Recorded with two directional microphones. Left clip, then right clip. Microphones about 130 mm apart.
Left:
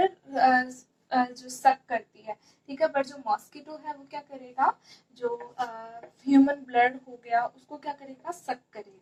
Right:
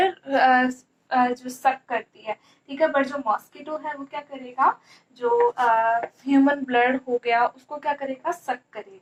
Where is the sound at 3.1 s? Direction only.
40° right (ahead or behind).